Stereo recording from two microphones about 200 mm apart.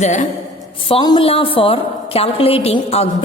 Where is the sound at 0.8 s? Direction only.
25° left (ahead or behind).